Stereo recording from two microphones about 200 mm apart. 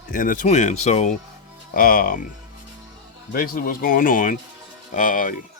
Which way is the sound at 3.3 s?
45° left (ahead or behind).